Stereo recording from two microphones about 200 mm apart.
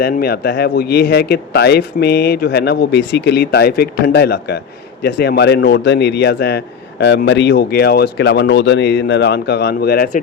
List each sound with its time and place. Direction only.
0.0 s speech: 50° left (ahead or behind)